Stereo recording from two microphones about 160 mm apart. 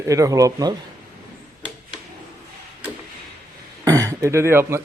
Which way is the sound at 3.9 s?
20° right (ahead or behind).